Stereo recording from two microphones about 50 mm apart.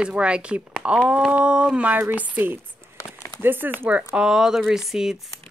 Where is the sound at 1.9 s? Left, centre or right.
Right.